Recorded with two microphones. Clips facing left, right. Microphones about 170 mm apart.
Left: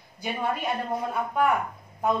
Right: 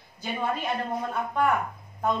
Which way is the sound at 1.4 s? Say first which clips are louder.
Left 1 dB; 10° left (ahead or behind).